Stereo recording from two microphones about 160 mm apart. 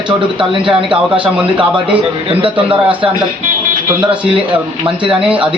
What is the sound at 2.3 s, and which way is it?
Speech, 35° right (ahead or behind).